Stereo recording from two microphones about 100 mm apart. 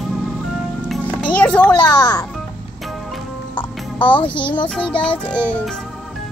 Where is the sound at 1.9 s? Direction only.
45° left (ahead or behind).